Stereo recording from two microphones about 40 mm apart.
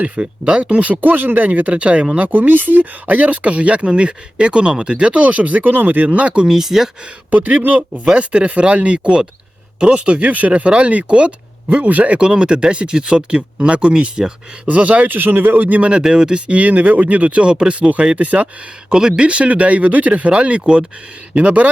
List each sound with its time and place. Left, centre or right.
0.0 s speech: right
1.5 s speech: right
2.1 s speech: right
6.3 s speech: right
6.6 s speech: centre
7.3 s speech: right
8.1 s speech: right
12.1 s speech: right
14.7 s speech: right
15.8 s speech: right
18.2 s speech: right
18.9 s speech: centre; by 21.7 s right